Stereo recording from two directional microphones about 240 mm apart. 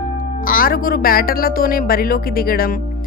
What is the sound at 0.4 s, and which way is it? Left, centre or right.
Speech, left.